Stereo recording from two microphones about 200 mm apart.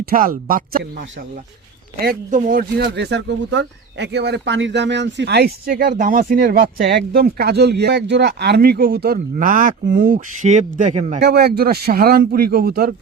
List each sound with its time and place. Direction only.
0.1 s speech: 45° right (ahead or behind)
2.0 s speech: 45° right (ahead or behind)
9.1 s speech: 40° right (ahead or behind)
11.2 s speech: 55° right (ahead or behind)